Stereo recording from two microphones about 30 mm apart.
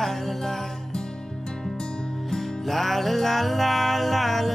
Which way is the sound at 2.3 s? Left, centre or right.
Centre.